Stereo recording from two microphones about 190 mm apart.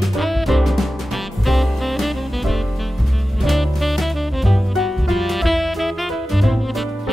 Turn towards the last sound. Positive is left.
turn(degrees=0)  # may be behind; listen again after turning